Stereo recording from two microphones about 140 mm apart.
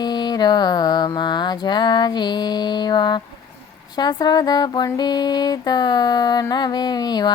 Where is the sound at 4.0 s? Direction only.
30° left (ahead or behind).